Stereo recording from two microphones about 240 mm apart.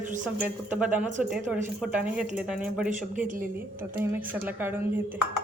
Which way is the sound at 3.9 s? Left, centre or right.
Centre.